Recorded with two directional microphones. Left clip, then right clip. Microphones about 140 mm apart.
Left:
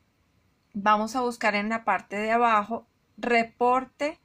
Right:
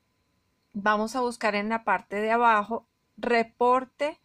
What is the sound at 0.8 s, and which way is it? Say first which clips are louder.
Speech: left 2 dB; 55° right (ahead or behind).